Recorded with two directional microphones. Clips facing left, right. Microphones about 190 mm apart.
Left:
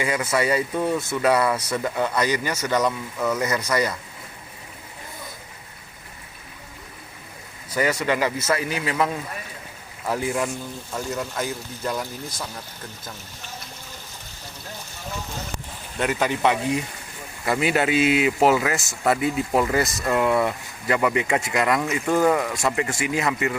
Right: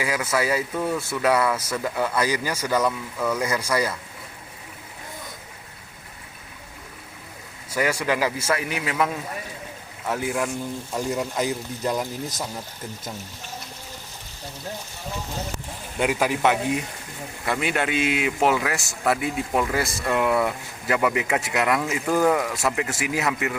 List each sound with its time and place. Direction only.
0.0 s speech: 5° right (ahead or behind)
7.8 s speech: 5° right (ahead or behind)
10.9 s speech: 15° right (ahead or behind)
16.0 s speech: 10° right (ahead or behind)